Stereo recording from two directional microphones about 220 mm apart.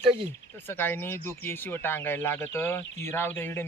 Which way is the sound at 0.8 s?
10° left (ahead or behind).